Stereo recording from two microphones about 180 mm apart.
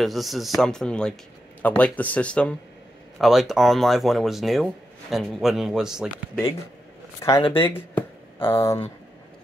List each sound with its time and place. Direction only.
0.0 s speech: centre (ahead or behind)
7.2 s speech: 15° left (ahead or behind)